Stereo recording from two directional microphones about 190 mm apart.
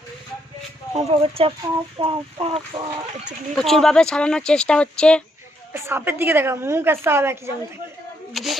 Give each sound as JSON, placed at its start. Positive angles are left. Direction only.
{"t": 0.9, "sound": "speech", "side_deg": -35}
{"t": 2.0, "sound": "fowl", "side_deg": -25}
{"t": 3.6, "sound": "speech", "side_deg": 0}
{"t": 5.7, "sound": "a woman's voice", "side_deg": -10}
{"t": 8.3, "sound": "speech", "side_deg": 0}